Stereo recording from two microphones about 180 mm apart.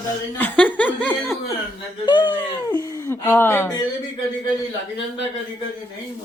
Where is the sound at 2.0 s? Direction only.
25° left (ahead or behind).